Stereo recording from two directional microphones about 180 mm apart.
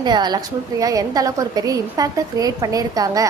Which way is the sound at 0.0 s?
25° right (ahead or behind).